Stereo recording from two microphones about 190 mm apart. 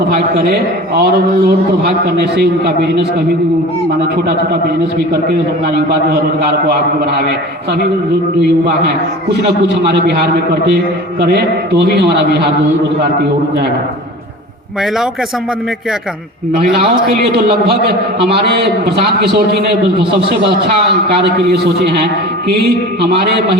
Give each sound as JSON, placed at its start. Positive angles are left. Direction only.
{"t": 0.3, "sound": "a man's voice", "side_deg": -55}
{"t": 7.2, "sound": "a man's voice", "side_deg": -55}
{"t": 9.8, "sound": "a man's voice", "side_deg": -60}
{"t": 16.8, "sound": "a man's voice", "side_deg": -55}
{"t": 18.4, "sound": "a man's voice", "side_deg": -60}